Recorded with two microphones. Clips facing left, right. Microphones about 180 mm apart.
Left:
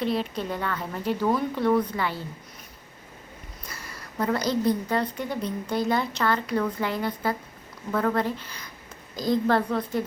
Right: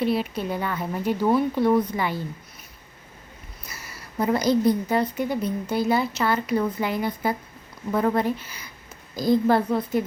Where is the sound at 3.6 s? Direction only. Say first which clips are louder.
Even; 5° right (ahead or behind).